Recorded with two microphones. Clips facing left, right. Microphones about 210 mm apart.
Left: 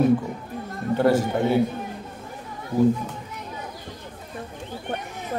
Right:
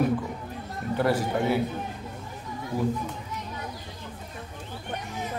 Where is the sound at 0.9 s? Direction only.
25° left (ahead or behind).